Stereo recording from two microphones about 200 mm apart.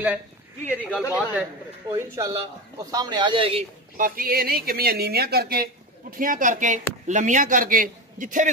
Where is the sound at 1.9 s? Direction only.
15° right (ahead or behind).